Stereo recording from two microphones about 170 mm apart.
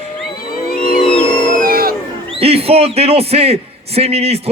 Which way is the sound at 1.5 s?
60° right (ahead or behind).